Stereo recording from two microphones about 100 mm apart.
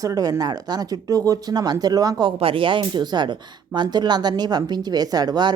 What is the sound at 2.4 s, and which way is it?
Speech, 60° right (ahead or behind).